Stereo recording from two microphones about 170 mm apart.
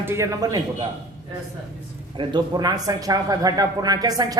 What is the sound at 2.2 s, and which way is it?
Speech, 25° right (ahead or behind).